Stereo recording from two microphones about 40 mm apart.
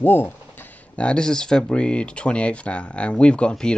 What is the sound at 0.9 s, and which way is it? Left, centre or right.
Speech, left.